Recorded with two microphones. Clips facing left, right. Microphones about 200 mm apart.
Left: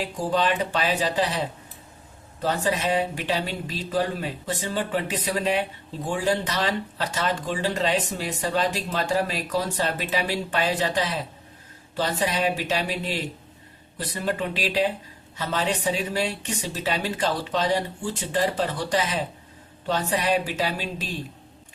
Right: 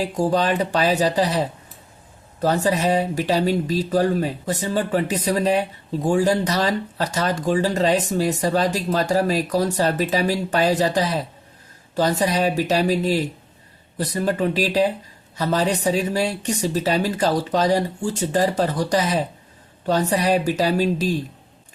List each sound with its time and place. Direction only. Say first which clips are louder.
0.0 s speech: right 4 dB; 40° right (ahead or behind)